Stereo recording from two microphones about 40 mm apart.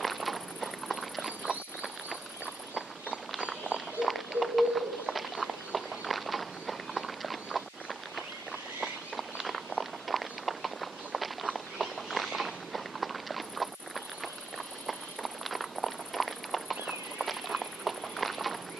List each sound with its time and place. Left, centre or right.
0.0 s walk: centre
1.8 s clip-clop: right
3.3 s run: right
4.0 s a sound: centre
6.7 s walk: centre
9.1 s a sound: centre
12.4 s walk: centre
14.9 s clip-clop: centre